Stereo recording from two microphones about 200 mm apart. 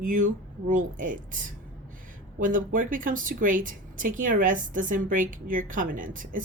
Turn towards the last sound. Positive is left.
turn(degrees=-40)  # may be behind; listen again after turning